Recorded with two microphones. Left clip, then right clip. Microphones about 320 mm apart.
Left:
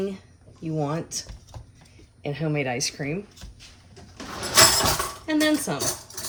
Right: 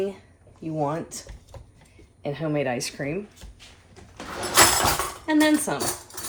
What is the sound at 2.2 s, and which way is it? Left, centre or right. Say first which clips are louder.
Speech: right 1 dB; right.